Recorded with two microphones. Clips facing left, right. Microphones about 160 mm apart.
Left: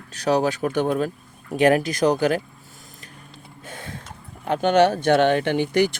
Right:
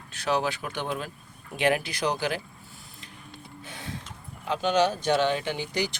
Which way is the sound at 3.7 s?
50° left (ahead or behind).